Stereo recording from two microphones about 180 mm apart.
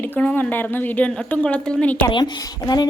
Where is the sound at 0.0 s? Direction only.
10° left (ahead or behind).